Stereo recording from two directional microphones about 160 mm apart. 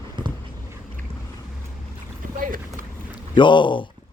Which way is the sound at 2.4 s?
60° right (ahead or behind).